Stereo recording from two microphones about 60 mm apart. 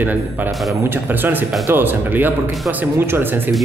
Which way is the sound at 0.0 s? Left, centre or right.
Right.